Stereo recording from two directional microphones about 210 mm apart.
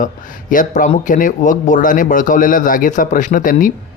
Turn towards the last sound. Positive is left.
turn(degrees=40)  # may be behind; listen again after turning